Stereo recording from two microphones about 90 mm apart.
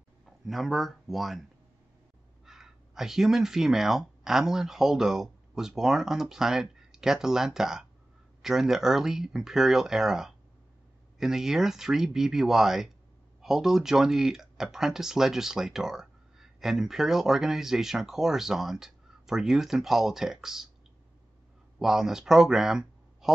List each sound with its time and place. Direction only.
0.5 s speech: centre (ahead or behind)
2.4 s speech: 5° right (ahead or behind)
21.7 s speech: 5° right (ahead or behind)